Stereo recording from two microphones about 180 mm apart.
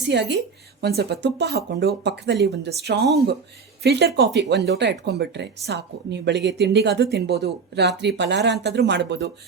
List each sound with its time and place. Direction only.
0.0 s speech: 70° right (ahead or behind)